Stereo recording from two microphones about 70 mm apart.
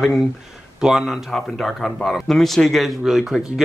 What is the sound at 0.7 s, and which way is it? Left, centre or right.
Speech, centre.